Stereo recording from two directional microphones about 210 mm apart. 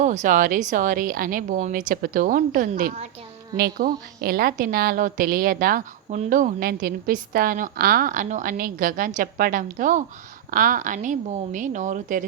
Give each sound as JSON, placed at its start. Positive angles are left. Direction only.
{"t": 0.0, "sound": "a woman's voice", "side_deg": -35}